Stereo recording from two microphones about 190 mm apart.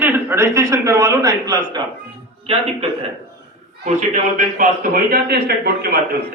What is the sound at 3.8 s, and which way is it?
A man's voice, 40° right (ahead or behind).